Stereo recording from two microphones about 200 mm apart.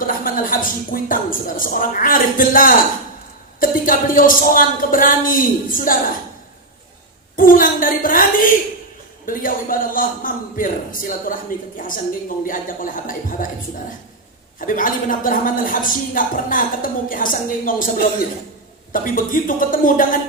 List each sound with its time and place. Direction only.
0.0 s speech: 45° left (ahead or behind)
7.3 s speech: 45° left (ahead or behind)
14.7 s speech: 40° left (ahead or behind)
18.9 s speech: 45° left (ahead or behind)